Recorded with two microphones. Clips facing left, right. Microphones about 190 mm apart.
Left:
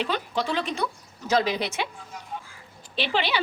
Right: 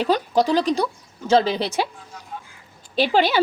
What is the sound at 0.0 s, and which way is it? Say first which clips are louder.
Speech: right 8 dB; 40° right (ahead or behind).